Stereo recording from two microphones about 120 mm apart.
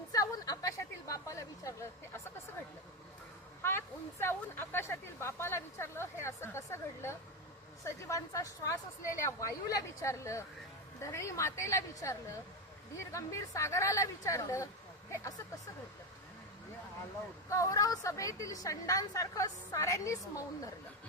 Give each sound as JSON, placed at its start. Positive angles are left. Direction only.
{"t": 0.1, "sound": "a sound", "side_deg": 30}
{"t": 3.6, "sound": "a woman's voice", "side_deg": 20}
{"t": 17.5, "sound": "a woman's voice", "side_deg": 25}